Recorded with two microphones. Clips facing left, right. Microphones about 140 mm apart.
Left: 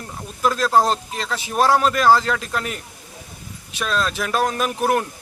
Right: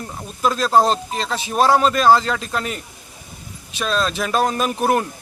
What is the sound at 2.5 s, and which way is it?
Speech, centre (ahead or behind).